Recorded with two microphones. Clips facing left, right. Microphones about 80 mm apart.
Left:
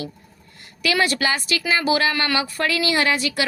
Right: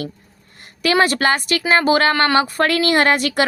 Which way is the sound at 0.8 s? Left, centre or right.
Right.